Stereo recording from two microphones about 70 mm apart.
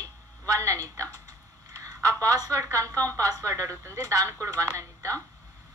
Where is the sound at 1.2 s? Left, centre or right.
Right.